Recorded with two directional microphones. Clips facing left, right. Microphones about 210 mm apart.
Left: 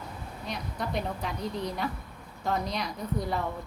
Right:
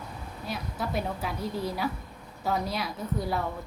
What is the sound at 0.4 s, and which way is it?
A woman's voice, 5° right (ahead or behind).